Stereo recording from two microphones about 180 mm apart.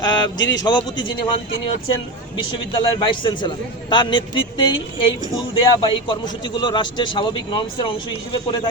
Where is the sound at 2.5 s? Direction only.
25° left (ahead or behind).